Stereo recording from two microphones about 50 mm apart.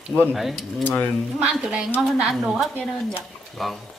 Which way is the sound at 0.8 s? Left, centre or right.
Left.